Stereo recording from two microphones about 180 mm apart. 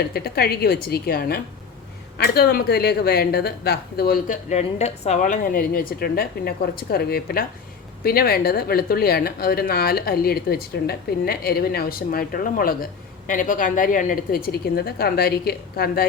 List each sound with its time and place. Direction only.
0.1 s speech: 60° left (ahead or behind)